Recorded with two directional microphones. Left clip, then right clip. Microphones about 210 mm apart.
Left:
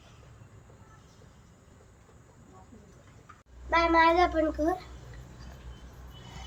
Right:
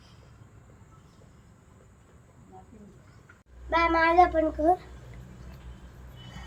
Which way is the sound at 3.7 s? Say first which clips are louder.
Left 1 dB; 35° left (ahead or behind).